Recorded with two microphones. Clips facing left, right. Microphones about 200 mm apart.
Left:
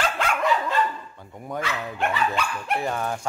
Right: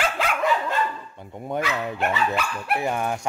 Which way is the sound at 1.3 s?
25° right (ahead or behind).